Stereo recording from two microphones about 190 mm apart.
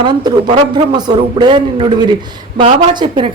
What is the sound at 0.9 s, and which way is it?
A man's voice, 25° right (ahead or behind).